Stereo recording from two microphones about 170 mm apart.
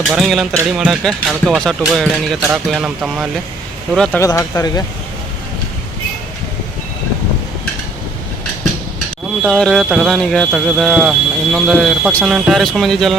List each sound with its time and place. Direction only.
0.1 s speech: centre (ahead or behind)
4.2 s speech: 20° left (ahead or behind)
9.4 s speech: 5° left (ahead or behind)